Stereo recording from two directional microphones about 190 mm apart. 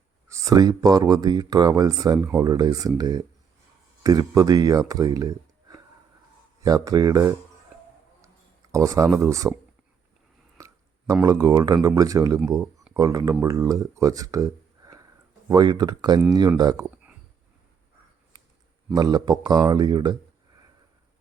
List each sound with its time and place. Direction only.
0.3 s speech: 15° right (ahead or behind)
8.7 s speech: 15° right (ahead or behind)
10.6 s a sound: 15° right (ahead or behind)
11.1 s speech: 15° right (ahead or behind)
18.9 s speech: 20° right (ahead or behind)